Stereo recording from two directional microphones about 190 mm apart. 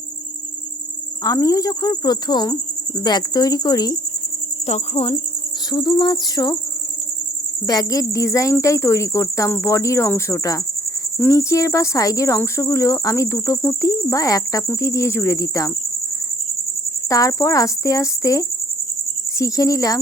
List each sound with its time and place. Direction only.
1.2 s cricket: 20° left (ahead or behind)
3.0 s speech: 20° left (ahead or behind)
4.6 s cricket: 30° left (ahead or behind)
5.7 s speech: 25° left (ahead or behind)
7.7 s cricket: 20° left (ahead or behind)
17.1 s cricket: 20° left (ahead or behind)
19.4 s speech: 20° left (ahead or behind)